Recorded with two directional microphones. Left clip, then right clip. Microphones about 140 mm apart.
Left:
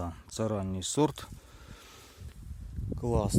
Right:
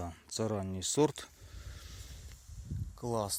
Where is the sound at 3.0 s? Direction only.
25° left (ahead or behind).